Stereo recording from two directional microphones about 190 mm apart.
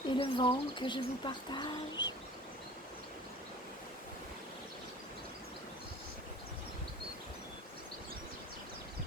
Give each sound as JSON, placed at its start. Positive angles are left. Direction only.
{"t": 0.1, "sound": "speech", "side_deg": 25}